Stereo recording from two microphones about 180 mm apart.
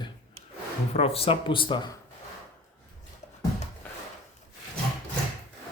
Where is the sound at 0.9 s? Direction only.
35° left (ahead or behind).